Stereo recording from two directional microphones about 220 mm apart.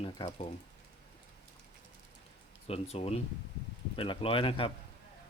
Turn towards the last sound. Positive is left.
turn(degrees=25)  # may be behind; listen again after turning